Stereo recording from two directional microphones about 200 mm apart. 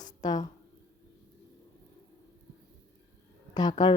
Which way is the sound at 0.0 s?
20° left (ahead or behind).